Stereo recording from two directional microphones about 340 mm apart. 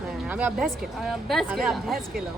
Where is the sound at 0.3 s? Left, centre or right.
Centre.